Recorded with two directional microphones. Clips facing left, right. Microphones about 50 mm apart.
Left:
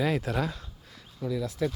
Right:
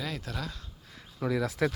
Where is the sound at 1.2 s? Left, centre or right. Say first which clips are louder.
Right 1 dB; right.